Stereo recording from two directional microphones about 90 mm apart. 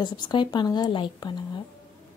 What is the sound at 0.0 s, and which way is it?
Speech, 60° left (ahead or behind).